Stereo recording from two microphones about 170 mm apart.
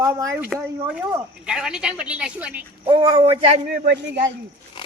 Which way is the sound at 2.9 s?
25° right (ahead or behind).